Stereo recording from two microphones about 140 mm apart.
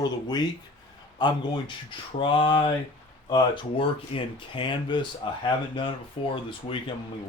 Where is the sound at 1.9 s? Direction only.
35° left (ahead or behind).